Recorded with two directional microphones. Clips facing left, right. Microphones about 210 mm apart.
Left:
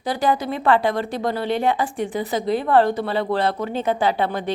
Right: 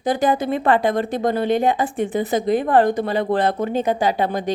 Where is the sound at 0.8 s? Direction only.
20° right (ahead or behind).